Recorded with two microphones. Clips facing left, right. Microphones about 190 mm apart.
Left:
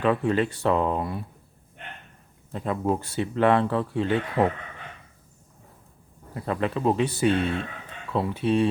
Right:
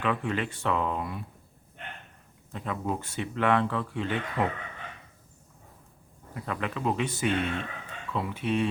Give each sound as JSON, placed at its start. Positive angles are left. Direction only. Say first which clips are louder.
{"t": 0.0, "sound": "speech", "louder": "left 7 dB", "side_deg": 35}
{"t": 2.5, "sound": "speech", "louder": "left 6 dB", "side_deg": 35}
{"t": 6.3, "sound": "speech", "louder": "left 6 dB", "side_deg": 35}